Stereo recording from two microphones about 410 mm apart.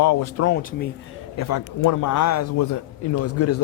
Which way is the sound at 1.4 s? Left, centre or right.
Left.